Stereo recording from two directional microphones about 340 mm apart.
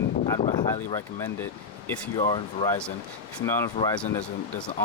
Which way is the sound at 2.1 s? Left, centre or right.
Centre.